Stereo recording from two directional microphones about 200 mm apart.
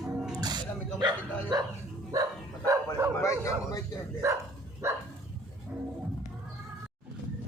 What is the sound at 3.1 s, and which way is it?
Speech, 15° left (ahead or behind).